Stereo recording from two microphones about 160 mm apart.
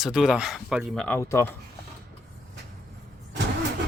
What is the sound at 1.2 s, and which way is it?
Speech, 15° left (ahead or behind).